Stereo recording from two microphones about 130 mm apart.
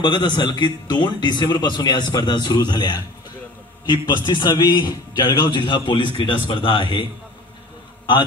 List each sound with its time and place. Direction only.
0.0 s a man's voice: 35° left (ahead or behind)